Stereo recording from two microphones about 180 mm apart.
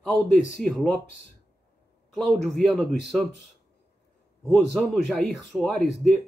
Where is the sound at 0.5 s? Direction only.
Centre (ahead or behind).